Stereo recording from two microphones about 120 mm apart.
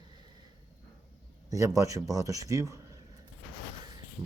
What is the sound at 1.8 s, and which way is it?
Speech, 30° right (ahead or behind).